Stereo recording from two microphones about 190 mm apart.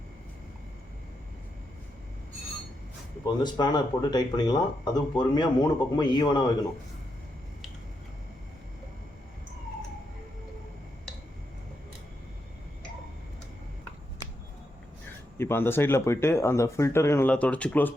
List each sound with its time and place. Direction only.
3.2 s speech: 20° left (ahead or behind)
15.4 s speech: 10° left (ahead or behind)